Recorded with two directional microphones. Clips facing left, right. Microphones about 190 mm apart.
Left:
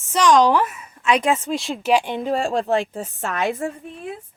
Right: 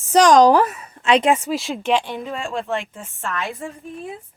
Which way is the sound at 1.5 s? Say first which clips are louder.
Left 1 dB; centre (ahead or behind).